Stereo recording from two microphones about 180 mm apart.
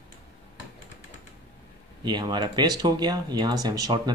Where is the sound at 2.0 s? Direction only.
25° right (ahead or behind).